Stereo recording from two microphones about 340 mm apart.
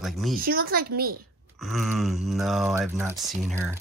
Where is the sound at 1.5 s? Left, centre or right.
Centre.